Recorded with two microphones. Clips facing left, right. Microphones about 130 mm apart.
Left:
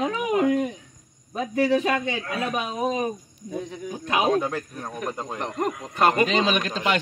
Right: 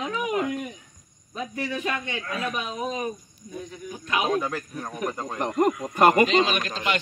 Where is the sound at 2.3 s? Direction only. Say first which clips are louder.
Left 1 dB; 30° left (ahead or behind).